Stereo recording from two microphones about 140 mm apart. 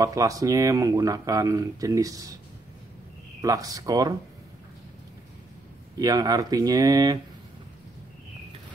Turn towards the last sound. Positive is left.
turn(degrees=-30)  # may be behind; listen again after turning